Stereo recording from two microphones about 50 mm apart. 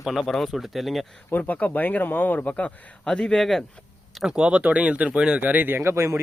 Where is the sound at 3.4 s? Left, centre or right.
Centre.